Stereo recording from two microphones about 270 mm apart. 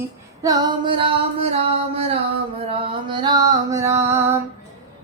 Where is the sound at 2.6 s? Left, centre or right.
Centre.